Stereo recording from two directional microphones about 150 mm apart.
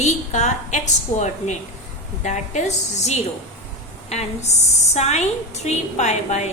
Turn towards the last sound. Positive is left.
turn(degrees=50)  # may be behind; listen again after turning